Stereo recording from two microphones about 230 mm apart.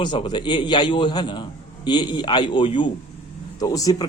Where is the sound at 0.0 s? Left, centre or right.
Centre.